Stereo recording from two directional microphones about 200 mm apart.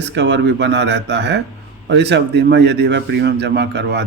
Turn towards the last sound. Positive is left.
turn(degrees=-55)  # may be behind; listen again after turning